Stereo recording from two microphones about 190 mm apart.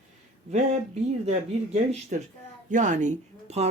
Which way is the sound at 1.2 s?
35° right (ahead or behind).